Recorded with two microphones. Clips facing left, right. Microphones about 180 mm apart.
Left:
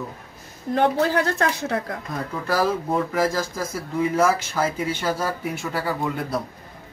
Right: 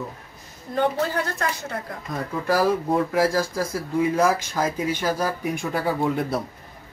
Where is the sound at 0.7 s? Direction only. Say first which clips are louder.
Left 3 dB; 80° left.